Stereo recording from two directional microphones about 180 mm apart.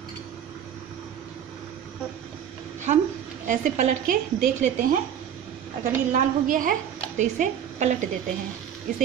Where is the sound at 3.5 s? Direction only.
45° right (ahead or behind).